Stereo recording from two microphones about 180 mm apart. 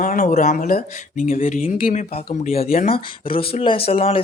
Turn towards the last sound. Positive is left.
turn(degrees=35)  # may be behind; listen again after turning